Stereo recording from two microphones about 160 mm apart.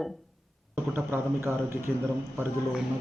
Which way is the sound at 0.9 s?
15° right (ahead or behind).